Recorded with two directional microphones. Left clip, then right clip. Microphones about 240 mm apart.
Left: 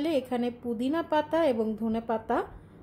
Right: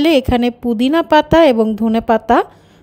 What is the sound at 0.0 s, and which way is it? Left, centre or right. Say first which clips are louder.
Speech: right 16 dB; right.